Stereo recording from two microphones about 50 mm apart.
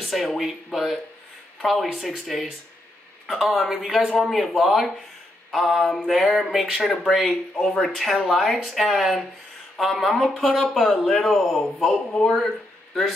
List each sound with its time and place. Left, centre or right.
0.0 s speech: centre